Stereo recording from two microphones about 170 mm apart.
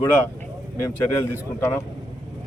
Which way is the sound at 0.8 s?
15° left (ahead or behind).